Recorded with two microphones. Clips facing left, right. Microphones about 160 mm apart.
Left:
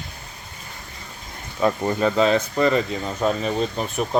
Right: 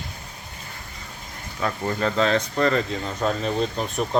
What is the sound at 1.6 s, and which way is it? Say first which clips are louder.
Speech: left 5 dB; 20° left (ahead or behind).